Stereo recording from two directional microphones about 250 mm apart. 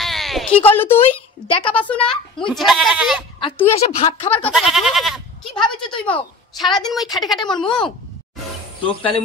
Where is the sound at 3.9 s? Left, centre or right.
Left.